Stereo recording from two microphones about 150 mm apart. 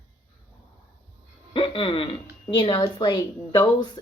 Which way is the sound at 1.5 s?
35° left (ahead or behind).